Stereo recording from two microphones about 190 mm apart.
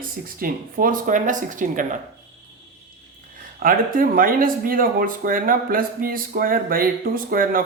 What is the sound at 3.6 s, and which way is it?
Speech, 50° right (ahead or behind).